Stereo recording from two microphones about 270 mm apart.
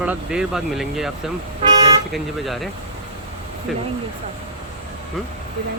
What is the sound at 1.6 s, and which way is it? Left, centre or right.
Toot, centre.